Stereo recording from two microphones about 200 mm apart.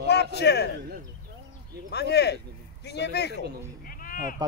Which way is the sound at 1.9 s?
55° left (ahead or behind).